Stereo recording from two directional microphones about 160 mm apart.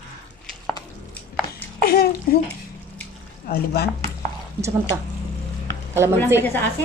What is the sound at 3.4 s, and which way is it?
Speech, 75° left (ahead or behind).